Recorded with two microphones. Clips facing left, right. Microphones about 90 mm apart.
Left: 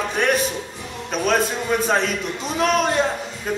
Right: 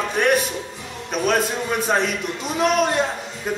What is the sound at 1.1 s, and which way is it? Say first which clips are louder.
Speech: even; 5° right (ahead or behind).